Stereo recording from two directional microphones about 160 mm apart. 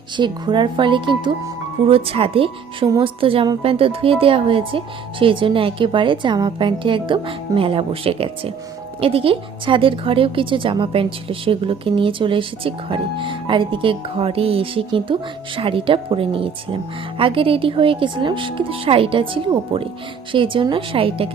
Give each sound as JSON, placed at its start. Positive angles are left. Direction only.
{"t": 0.2, "sound": "a woman's voice", "side_deg": -30}